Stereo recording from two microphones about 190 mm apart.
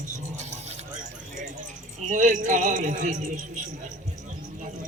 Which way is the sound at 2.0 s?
40° right (ahead or behind).